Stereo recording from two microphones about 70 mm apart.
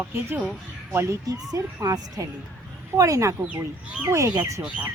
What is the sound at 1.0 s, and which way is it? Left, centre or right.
Speech, right.